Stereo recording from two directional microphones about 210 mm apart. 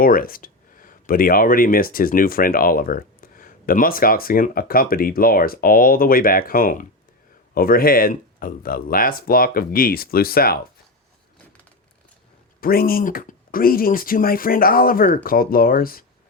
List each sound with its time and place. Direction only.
0.0 s speech: 45° left (ahead or behind)
12.5 s speech: 45° left (ahead or behind)